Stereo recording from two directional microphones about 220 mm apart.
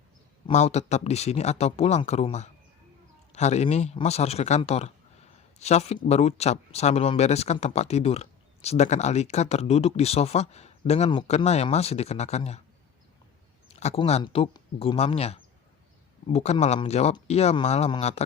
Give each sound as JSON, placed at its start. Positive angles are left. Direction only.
{"t": 0.4, "sound": "speech", "side_deg": 30}
{"t": 13.7, "sound": "speech", "side_deg": 30}